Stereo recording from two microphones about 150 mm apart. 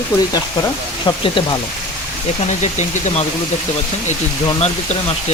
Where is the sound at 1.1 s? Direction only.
35° left (ahead or behind).